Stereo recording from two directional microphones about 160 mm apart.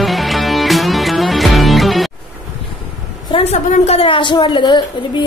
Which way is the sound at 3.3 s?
35° left (ahead or behind).